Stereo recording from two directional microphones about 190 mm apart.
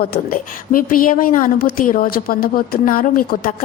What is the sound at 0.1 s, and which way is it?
A woman's voice, 50° left (ahead or behind).